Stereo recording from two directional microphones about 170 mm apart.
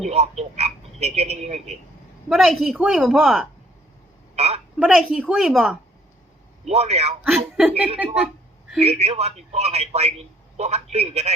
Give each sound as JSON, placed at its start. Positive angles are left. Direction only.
{"t": 0.0, "sound": "frog", "side_deg": -35}
{"t": 2.3, "sound": "speech", "side_deg": 0}
{"t": 4.4, "sound": "a sound", "side_deg": -40}
{"t": 4.8, "sound": "speech", "side_deg": -5}
{"t": 6.7, "sound": "speech", "side_deg": -35}
{"t": 7.3, "sound": "speech", "side_deg": -5}
{"t": 8.8, "sound": "speech", "side_deg": -40}